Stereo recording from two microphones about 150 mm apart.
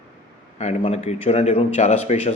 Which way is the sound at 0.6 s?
45° left (ahead or behind).